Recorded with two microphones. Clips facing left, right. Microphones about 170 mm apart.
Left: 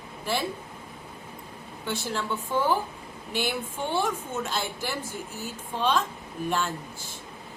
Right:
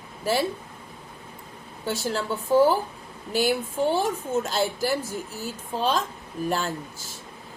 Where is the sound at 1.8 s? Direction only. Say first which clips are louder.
Right 3 dB; 35° right (ahead or behind).